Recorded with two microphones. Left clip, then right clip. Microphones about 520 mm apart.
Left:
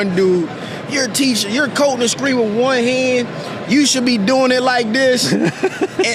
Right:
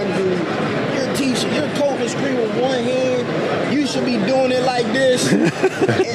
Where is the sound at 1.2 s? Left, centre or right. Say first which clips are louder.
Left 3 dB; left.